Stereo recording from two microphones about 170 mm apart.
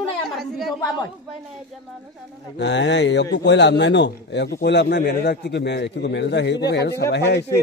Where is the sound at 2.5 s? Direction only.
90° left.